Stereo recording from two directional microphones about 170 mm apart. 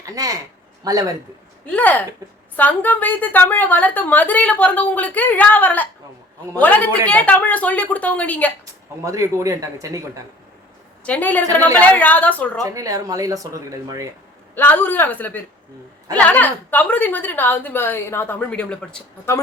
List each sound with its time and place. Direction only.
0.0 s speech: 20° right (ahead or behind)
1.6 s a woman's voice: 10° left (ahead or behind)
9.0 s speech: 20° right (ahead or behind)
11.0 s a woman's voice: 10° left (ahead or behind)
12.6 s speech: 20° right (ahead or behind)
14.5 s a woman's voice: 10° left (ahead or behind)